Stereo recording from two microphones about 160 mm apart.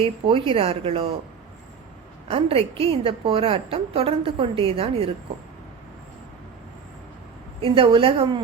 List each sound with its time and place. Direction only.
0.0 s a woman's voice: 35° right (ahead or behind)
2.2 s a woman's voice: 40° right (ahead or behind)
7.6 s a woman's voice: 35° right (ahead or behind)